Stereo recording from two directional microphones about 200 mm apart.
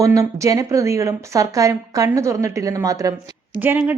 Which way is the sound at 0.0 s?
15° right (ahead or behind).